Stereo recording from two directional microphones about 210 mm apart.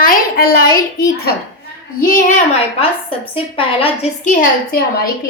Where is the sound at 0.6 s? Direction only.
15° left (ahead or behind).